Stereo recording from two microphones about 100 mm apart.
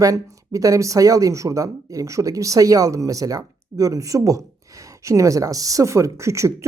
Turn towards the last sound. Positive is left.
turn(degrees=-30)  # may be behind; listen again after turning